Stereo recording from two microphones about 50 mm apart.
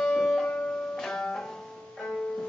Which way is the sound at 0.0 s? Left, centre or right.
Centre.